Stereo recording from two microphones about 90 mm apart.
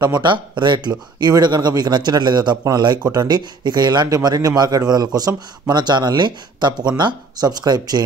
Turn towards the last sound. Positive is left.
turn(degrees=-50)  # may be behind; listen again after turning